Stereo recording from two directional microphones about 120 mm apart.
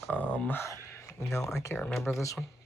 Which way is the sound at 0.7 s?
25° left (ahead or behind).